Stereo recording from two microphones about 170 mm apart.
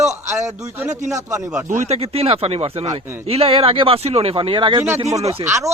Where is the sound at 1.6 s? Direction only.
45° right (ahead or behind).